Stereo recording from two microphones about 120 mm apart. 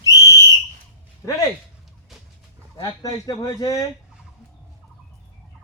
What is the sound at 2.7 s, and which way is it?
Speech, 30° left (ahead or behind).